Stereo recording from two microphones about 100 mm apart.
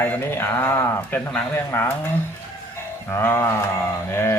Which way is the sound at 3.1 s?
25° left (ahead or behind).